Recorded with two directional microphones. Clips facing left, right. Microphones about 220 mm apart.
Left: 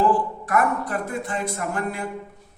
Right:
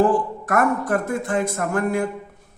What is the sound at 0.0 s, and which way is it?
Speech, 45° right (ahead or behind).